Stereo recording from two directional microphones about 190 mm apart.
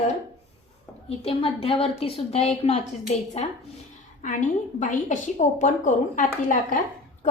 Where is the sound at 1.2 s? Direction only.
30° left (ahead or behind).